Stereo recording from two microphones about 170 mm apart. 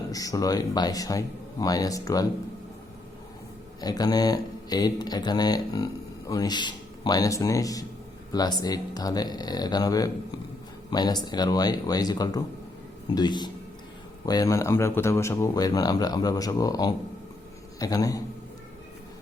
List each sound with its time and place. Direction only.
0.1 s speech: 20° left (ahead or behind)
3.8 s a man's voice: 25° left (ahead or behind)